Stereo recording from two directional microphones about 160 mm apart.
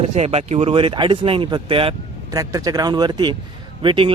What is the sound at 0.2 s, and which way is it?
Speech, 40° right (ahead or behind).